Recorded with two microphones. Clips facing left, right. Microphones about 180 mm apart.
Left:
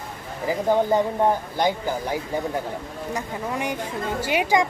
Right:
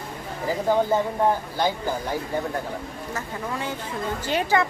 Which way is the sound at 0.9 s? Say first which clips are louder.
Left 1 dB; 15° left (ahead or behind).